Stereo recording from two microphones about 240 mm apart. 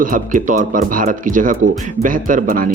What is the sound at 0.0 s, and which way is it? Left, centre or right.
Speech, right.